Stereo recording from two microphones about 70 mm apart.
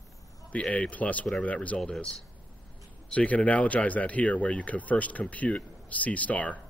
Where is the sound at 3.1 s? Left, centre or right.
Left.